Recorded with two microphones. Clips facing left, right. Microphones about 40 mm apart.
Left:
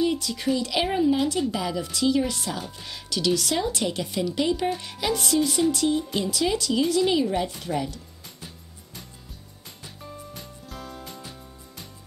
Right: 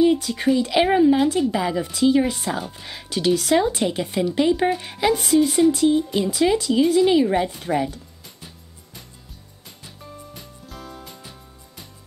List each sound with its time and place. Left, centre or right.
0.0 s speech: right
9.8 s music: centre